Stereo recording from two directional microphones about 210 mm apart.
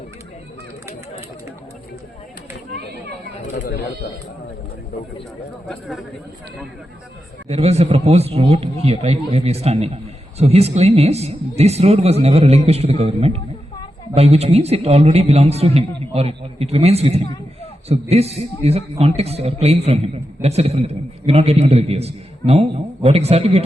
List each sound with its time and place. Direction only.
3.5 s speech: 45° left (ahead or behind)
5.6 s speech: centre (ahead or behind)
7.4 s a man's voice: 30° right (ahead or behind)